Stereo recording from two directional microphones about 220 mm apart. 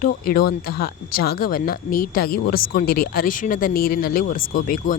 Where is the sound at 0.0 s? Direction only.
40° left (ahead or behind).